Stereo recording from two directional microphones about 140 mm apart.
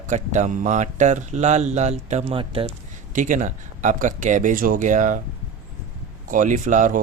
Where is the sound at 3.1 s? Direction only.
65° right (ahead or behind).